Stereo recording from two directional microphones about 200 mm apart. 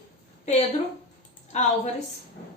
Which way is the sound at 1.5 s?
35° left (ahead or behind).